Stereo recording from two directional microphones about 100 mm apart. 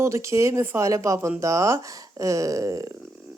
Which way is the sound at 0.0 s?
30° right (ahead or behind).